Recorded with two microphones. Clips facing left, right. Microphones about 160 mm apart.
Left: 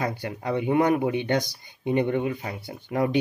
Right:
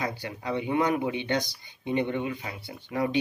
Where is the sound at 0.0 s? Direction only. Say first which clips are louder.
Left 4 dB; 50° left (ahead or behind).